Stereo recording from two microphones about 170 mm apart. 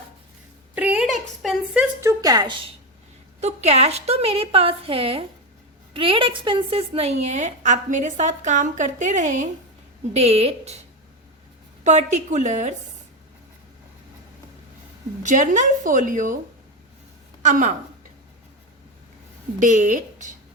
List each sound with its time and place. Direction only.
0.8 s a woman's voice: 5° right (ahead or behind); by 2.6 s 25° right (ahead or behind)
3.4 s a woman's voice: 40° right (ahead or behind)
11.8 s a woman's voice: 45° right (ahead or behind)
15.2 s a woman's voice: 50° right (ahead or behind)
17.4 s a woman's voice: 45° right (ahead or behind)
19.5 s a woman's voice: 45° right (ahead or behind)